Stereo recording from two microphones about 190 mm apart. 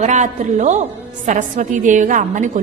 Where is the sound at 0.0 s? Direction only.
40° right (ahead or behind).